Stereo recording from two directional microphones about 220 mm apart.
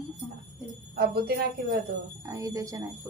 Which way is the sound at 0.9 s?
45° right (ahead or behind).